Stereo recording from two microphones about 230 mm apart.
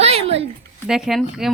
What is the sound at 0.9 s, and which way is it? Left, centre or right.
Speech, centre.